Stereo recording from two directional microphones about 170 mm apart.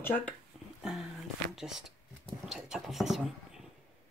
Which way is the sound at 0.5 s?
Centre (ahead or behind).